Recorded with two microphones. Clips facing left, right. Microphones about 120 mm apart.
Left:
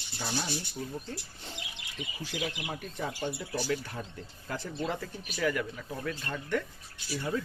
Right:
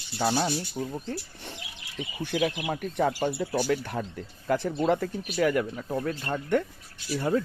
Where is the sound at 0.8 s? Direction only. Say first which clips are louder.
Right 6 dB; 35° right (ahead or behind).